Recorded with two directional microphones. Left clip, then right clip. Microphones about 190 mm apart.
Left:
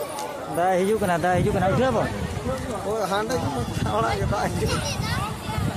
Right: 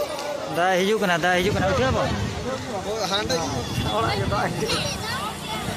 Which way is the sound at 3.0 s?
35° left (ahead or behind).